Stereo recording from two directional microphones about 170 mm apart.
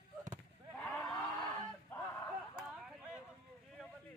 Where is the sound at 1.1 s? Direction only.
20° left (ahead or behind).